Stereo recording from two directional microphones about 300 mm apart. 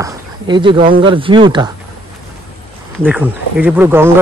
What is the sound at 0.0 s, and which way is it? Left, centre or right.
Speech, centre.